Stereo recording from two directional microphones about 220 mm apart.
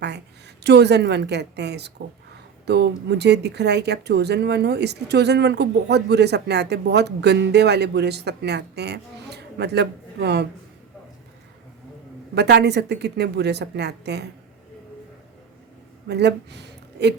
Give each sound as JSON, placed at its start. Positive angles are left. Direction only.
{"t": 0.0, "sound": "a woman's voice", "side_deg": -50}
{"t": 12.3, "sound": "speech", "side_deg": -50}
{"t": 16.0, "sound": "speech", "side_deg": -50}